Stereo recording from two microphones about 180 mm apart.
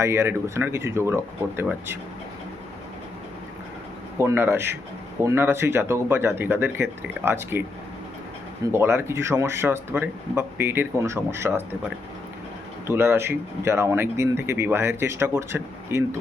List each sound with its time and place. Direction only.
0.0 s speech: 15° right (ahead or behind)
4.2 s speech: 15° right (ahead or behind)
8.7 s speech: 15° right (ahead or behind)
12.9 s speech: 15° right (ahead or behind)